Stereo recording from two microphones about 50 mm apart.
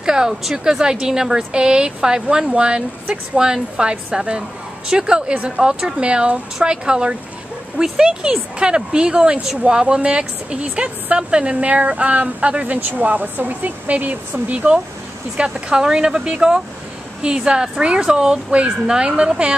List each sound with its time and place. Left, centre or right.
0.0 s speech: centre